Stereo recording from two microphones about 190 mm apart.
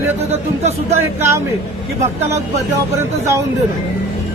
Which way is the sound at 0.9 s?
15° right (ahead or behind).